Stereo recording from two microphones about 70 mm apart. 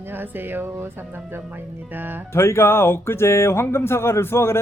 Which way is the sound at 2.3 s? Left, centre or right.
Left.